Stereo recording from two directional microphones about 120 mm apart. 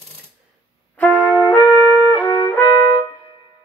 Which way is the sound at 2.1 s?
15° left (ahead or behind).